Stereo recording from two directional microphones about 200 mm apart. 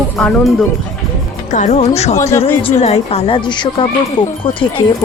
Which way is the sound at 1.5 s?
40° left (ahead or behind).